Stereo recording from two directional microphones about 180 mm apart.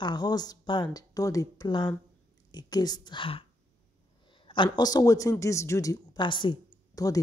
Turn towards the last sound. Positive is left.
turn(degrees=20)  # may be behind; listen again after turning